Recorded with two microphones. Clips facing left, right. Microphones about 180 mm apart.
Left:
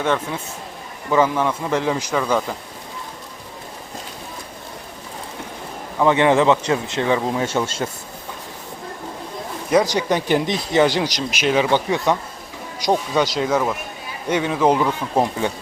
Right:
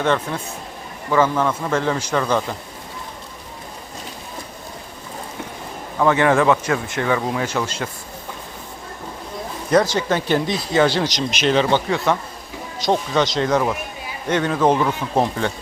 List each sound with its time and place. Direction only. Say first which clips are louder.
0.0 s speech: right 1 dB; 10° left (ahead or behind)
2.2 s speech: even; centre (ahead or behind)
6.0 s a man's voice: left 1 dB; 20° left (ahead or behind)
9.6 s speech: even; 10° left (ahead or behind)